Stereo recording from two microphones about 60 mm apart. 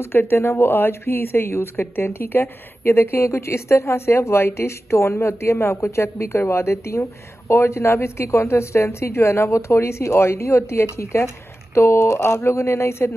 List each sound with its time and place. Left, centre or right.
0.0 s a woman's voice: left